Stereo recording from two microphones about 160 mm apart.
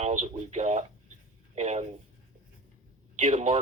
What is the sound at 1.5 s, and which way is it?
Speech, 45° right (ahead or behind).